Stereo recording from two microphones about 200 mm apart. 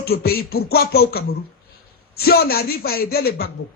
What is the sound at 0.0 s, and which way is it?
Speech, 50° left (ahead or behind).